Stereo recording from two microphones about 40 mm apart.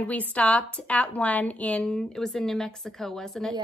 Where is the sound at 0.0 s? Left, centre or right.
Left.